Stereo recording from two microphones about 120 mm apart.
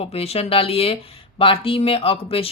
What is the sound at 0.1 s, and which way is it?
Speech, 55° left (ahead or behind).